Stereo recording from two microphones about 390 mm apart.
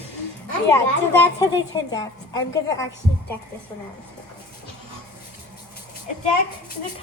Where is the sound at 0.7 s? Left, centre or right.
Centre.